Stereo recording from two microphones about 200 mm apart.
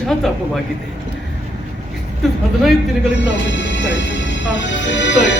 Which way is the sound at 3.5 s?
65° left (ahead or behind).